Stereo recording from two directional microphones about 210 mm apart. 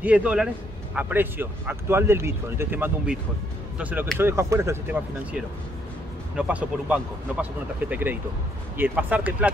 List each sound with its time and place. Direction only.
0.0 s speech: 5° right (ahead or behind)